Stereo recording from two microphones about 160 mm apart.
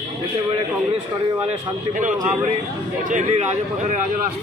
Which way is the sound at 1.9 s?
50° right (ahead or behind).